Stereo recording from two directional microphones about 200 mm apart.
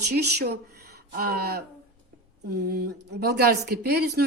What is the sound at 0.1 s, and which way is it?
Speech, 55° right (ahead or behind).